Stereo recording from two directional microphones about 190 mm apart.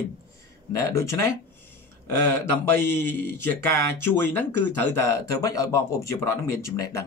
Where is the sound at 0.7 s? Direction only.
15° left (ahead or behind).